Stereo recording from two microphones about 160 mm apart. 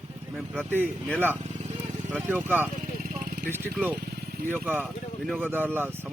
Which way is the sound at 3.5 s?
15° right (ahead or behind).